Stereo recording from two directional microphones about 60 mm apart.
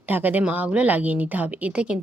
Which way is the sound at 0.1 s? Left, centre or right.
Right.